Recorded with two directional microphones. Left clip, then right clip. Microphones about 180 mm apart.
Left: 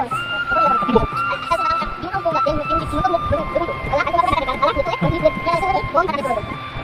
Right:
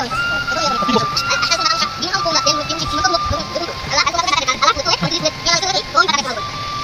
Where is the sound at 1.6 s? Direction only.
20° right (ahead or behind).